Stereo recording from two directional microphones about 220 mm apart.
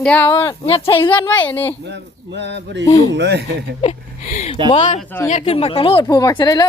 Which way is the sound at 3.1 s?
50° right (ahead or behind).